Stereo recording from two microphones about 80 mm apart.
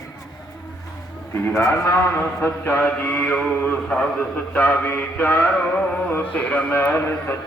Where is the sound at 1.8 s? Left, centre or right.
Left.